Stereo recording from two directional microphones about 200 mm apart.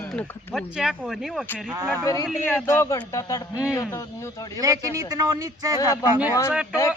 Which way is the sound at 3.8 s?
15° left (ahead or behind).